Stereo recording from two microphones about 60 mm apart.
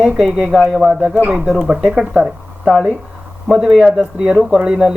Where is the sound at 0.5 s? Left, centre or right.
Centre.